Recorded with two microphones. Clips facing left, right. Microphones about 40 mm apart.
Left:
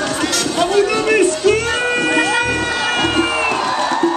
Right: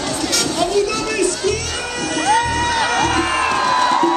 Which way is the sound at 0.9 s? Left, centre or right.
Left.